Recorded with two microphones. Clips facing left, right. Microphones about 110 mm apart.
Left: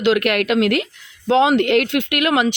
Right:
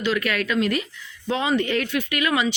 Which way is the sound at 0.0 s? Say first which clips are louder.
Left 7 dB; 70° left (ahead or behind).